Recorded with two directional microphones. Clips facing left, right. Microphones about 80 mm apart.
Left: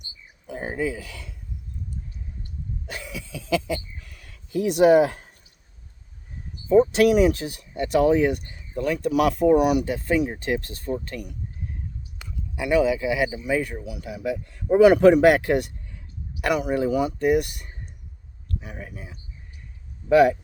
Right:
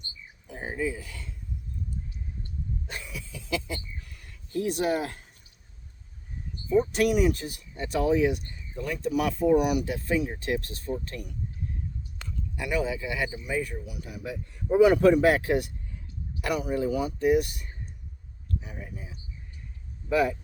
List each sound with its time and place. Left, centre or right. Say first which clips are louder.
0.4 s speech: left 4 dB; left
2.8 s a sound: left 4 dB; left
6.7 s speech: left 7 dB; left
12.2 s a sound: right 1 dB; centre
12.5 s speech: left 8 dB; left
16.4 s speech: left 5 dB; left
18.6 s speech: left 3 dB; left